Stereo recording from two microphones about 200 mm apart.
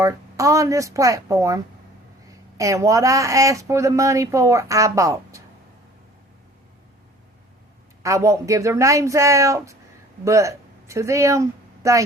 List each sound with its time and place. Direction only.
0.0 s speech: 15° right (ahead or behind)
8.0 s speech: 15° right (ahead or behind)